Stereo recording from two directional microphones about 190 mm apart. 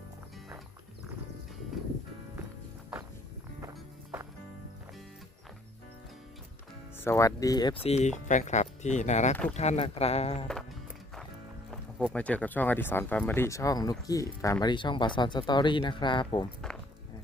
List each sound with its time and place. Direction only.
6.9 s speech: 10° left (ahead or behind); by 10.4 s 35° left (ahead or behind)
11.7 s speech: 5° left (ahead or behind); by 16.5 s 25° left (ahead or behind)